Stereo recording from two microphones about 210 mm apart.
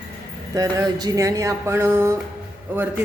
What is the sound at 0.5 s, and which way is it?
A woman's voice, 15° right (ahead or behind).